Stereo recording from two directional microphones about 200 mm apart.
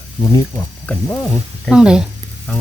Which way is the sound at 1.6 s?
5° right (ahead or behind).